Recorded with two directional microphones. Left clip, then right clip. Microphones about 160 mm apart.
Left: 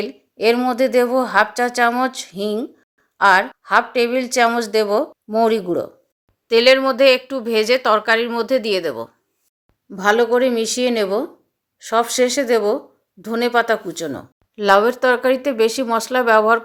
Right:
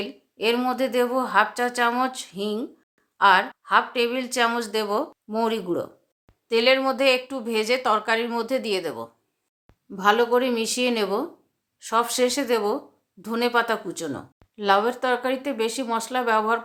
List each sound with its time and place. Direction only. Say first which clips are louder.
0.0 s speech: left 7 dB; 30° left (ahead or behind)